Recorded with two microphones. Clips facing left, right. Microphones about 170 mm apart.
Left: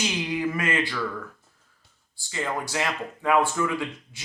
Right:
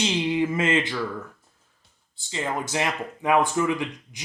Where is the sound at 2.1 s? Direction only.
20° right (ahead or behind).